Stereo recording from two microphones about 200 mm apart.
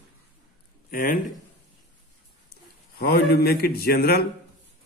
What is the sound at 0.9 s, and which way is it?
Speech, 45° left (ahead or behind).